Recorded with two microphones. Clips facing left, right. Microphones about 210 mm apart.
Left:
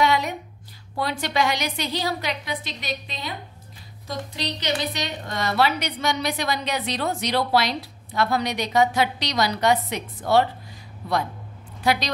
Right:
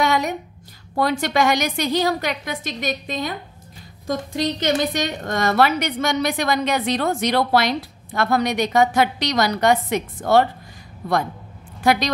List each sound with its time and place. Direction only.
0.0 s a sound: 45° right (ahead or behind)
0.9 s a woman's voice: 45° right (ahead or behind)
11.8 s speech: 50° right (ahead or behind)